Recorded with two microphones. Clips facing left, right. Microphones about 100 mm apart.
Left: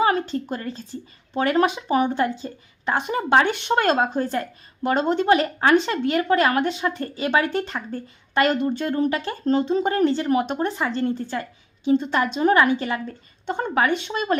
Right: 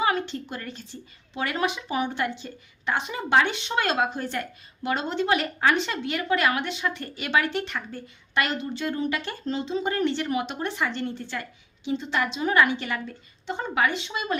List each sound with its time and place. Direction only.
0.0 s a woman's voice: 40° left (ahead or behind)
7.5 s a woman's voice: 45° left (ahead or behind)
9.6 s speech: 50° left (ahead or behind)
13.5 s a woman's voice: 50° left (ahead or behind)